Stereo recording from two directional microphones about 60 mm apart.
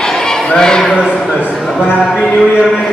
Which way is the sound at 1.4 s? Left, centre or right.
Right.